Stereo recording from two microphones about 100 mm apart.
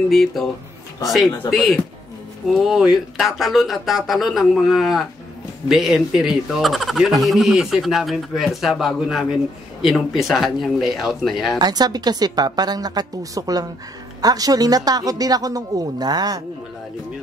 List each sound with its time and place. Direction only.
0.1 s speech: centre (ahead or behind)
11.5 s a woman's voice: 45° right (ahead or behind)